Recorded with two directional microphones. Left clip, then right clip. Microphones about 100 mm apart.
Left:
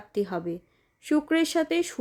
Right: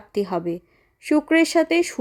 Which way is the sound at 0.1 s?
50° right (ahead or behind).